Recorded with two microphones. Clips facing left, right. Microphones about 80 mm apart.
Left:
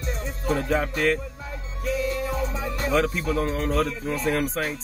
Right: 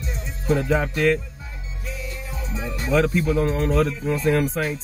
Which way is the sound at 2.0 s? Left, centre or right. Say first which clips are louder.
Left 9 dB; left.